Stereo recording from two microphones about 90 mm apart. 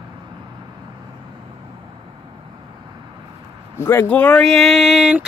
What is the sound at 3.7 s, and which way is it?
Speech, 25° left (ahead or behind).